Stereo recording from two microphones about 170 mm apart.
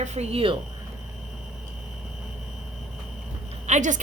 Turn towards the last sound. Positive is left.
turn(degrees=-45)  # may be behind; listen again after turning